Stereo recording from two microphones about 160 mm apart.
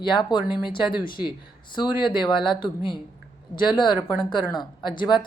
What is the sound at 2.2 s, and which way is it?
Speech, 30° left (ahead or behind).